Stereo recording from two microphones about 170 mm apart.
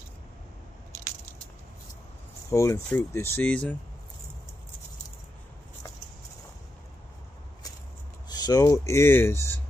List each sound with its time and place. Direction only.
2.5 s speech: 15° left (ahead or behind)
8.3 s speech: 25° left (ahead or behind)